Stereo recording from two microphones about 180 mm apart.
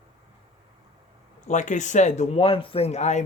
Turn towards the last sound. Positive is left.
turn(degrees=40)  # may be behind; listen again after turning